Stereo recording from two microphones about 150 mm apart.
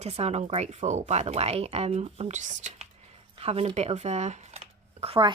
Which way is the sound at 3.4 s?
40° right (ahead or behind).